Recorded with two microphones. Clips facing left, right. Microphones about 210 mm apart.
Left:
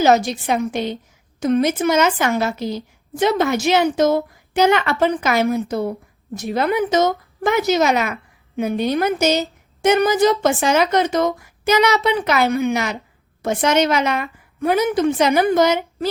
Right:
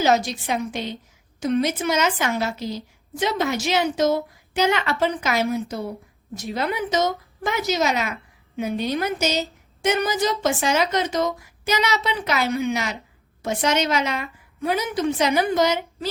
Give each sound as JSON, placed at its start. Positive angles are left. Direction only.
{"t": 0.0, "sound": "a woman's voice", "side_deg": 55}